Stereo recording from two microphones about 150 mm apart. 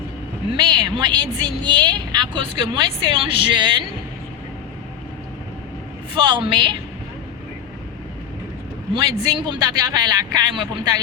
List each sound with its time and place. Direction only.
0.9 s speech: 30° right (ahead or behind)
6.1 s speech: 30° right (ahead or behind)
9.0 s speech: 30° right (ahead or behind)